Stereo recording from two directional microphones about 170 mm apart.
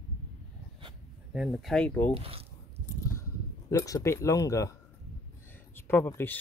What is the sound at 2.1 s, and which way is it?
Speech, 35° right (ahead or behind).